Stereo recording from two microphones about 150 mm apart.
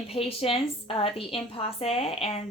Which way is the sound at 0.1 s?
40° left (ahead or behind).